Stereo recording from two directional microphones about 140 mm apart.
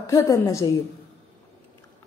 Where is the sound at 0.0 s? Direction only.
20° left (ahead or behind).